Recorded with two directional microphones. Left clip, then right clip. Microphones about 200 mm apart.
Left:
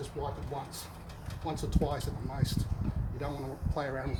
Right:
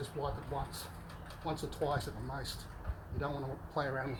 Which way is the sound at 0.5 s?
20° left (ahead or behind).